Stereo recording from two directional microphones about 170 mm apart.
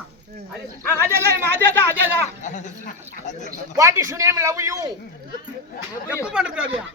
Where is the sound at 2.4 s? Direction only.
45° left (ahead or behind).